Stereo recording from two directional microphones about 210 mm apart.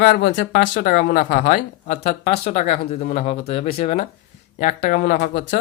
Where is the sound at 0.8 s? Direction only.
45° left (ahead or behind).